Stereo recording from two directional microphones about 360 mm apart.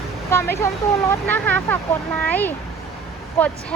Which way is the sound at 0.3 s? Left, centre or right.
Centre.